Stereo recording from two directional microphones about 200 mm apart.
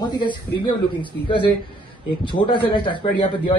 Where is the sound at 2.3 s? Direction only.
25° left (ahead or behind).